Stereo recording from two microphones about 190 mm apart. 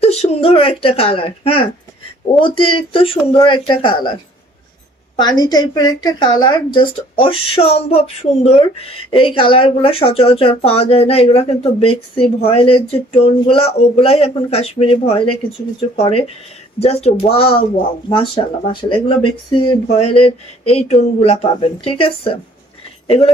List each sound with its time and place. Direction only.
0.0 s a woman's voice: 35° left (ahead or behind)